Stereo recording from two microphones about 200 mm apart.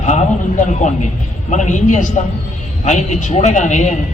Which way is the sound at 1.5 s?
35° left (ahead or behind).